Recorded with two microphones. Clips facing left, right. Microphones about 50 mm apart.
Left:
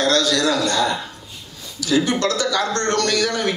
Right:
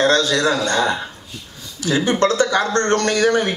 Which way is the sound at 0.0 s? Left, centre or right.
Right.